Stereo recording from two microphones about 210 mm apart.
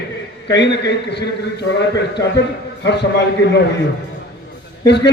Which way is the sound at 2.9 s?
55° left (ahead or behind).